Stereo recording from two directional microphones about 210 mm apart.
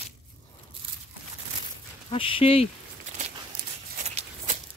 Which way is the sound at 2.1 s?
25° left (ahead or behind).